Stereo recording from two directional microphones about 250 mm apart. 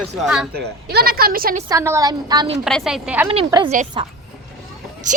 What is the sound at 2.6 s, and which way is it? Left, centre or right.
Speech, centre.